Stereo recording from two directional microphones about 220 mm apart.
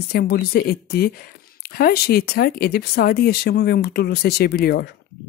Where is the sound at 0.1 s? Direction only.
45° left (ahead or behind).